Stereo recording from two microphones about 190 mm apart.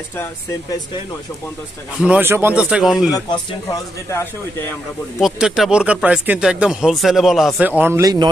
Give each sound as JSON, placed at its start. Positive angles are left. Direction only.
{"t": 2.0, "sound": "speech", "side_deg": -10}
{"t": 3.1, "sound": "speech", "side_deg": 20}
{"t": 5.2, "sound": "speech", "side_deg": 0}